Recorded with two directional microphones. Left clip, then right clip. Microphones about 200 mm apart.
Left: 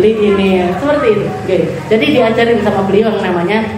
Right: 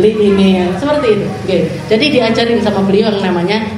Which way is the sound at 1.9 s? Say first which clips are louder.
Left 1 dB; 40° right (ahead or behind).